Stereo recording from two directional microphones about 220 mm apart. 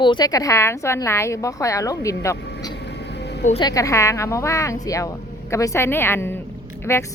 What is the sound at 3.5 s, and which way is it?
A woman's voice, 20° left (ahead or behind).